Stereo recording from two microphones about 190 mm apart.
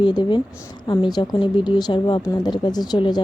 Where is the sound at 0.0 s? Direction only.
25° left (ahead or behind).